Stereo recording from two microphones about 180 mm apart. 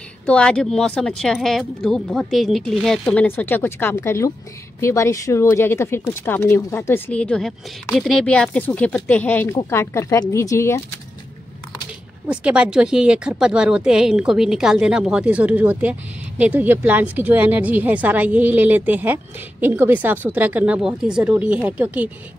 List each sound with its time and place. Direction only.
0.3 s speech: 5° left (ahead or behind)
12.3 s speech: 5° right (ahead or behind)